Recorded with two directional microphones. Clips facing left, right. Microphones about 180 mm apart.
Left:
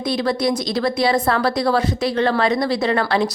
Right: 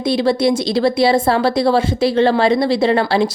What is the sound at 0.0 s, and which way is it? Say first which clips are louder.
A woman's voice: right 5 dB; 30° right (ahead or behind).